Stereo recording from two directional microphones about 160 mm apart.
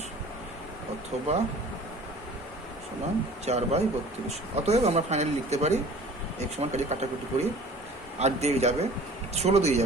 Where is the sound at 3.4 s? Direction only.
40° right (ahead or behind).